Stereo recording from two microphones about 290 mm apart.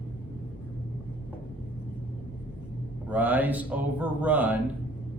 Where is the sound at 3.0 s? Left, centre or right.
Centre.